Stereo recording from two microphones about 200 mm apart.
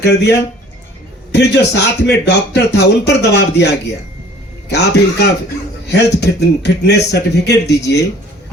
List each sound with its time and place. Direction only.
0.0 s speech: 55° left (ahead or behind)